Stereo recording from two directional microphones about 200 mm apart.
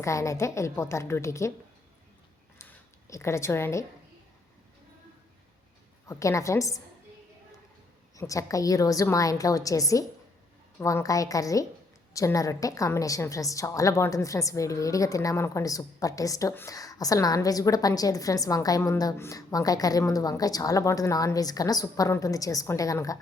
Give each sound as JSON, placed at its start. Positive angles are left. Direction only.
{"t": 0.0, "sound": "a woman's voice", "side_deg": 15}
{"t": 2.6, "sound": "a sound", "side_deg": 15}
{"t": 6.1, "sound": "a woman's voice", "side_deg": 15}
{"t": 8.1, "sound": "a woman's voice", "side_deg": 15}